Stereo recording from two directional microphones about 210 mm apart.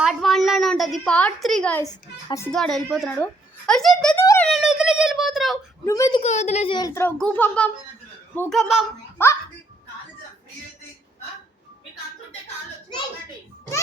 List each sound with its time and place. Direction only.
0.0 s a sound: centre (ahead or behind)
1.8 s a child's voice: 15° left (ahead or behind)
2.5 s a woman's voice: centre (ahead or behind)
4.4 s a sound: centre (ahead or behind)
5.8 s a child's voice: 15° left (ahead or behind)
6.1 s a child's voice: 30° left (ahead or behind); by 8.9 s centre (ahead or behind)
9.1 s a child's voice: 10° left (ahead or behind)